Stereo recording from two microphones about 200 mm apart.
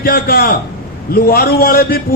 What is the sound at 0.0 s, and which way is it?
A man's voice, 50° left (ahead or behind).